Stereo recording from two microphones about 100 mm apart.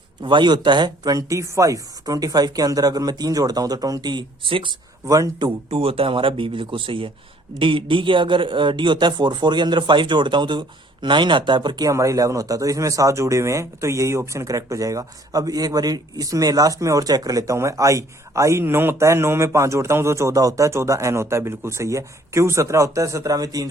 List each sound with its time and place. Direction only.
0.2 s speech: 50° right (ahead or behind)
5.0 s speech: 35° right (ahead or behind)
5.4 s a man's voice: 50° right (ahead or behind)
5.8 s a man's voice: 70° right (ahead or behind); by 11.9 s 50° right (ahead or behind)
11.9 s speech: 35° right (ahead or behind)